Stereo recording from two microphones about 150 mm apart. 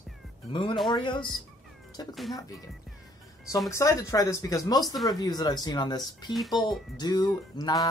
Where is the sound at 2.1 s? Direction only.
Centre (ahead or behind).